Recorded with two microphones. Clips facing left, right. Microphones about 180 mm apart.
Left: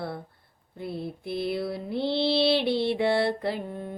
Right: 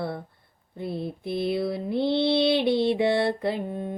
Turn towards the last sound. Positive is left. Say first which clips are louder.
# right 3 dB
turn(degrees=-20)  # may be behind; listen again after turning